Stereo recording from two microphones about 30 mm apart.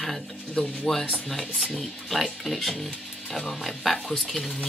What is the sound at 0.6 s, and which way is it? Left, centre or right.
Speech, left.